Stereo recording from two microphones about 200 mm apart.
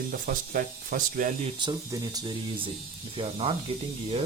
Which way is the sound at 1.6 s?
20° right (ahead or behind).